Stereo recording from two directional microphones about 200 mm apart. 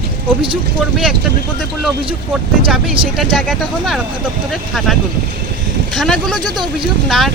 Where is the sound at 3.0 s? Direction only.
25° right (ahead or behind).